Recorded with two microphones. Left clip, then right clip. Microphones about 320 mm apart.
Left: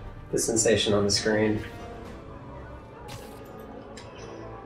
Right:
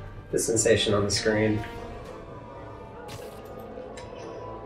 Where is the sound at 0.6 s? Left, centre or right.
Centre.